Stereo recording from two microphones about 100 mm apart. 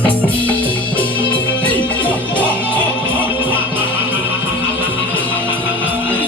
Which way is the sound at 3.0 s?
20° right (ahead or behind).